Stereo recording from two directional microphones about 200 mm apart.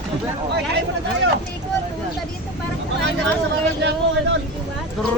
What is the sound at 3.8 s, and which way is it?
Speech, 60° right (ahead or behind).